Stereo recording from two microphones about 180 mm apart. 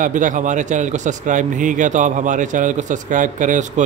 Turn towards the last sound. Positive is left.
turn(degrees=-45)  # may be behind; listen again after turning